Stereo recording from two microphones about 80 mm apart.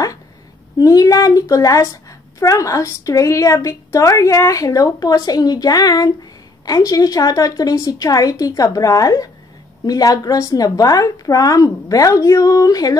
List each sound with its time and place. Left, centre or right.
0.7 s a woman's voice: left